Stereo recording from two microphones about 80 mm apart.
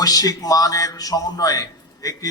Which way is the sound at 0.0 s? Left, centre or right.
Left.